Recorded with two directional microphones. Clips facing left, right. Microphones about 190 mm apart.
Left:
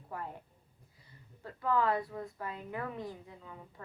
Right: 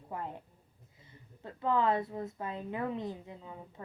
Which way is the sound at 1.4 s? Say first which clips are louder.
Right 1 dB; 20° right (ahead or behind).